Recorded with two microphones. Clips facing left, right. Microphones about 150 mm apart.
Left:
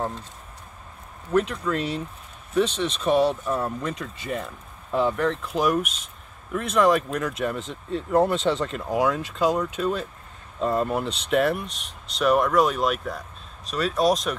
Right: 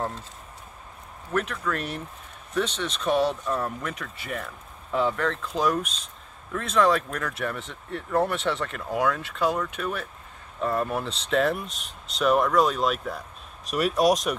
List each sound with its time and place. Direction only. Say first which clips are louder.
1.3 s speech: left 5 dB; 15° left (ahead or behind); by 13.2 s centre (ahead or behind)
13.7 s speech: even; 15° right (ahead or behind)